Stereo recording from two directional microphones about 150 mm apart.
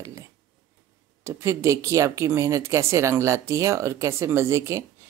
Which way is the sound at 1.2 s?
20° right (ahead or behind).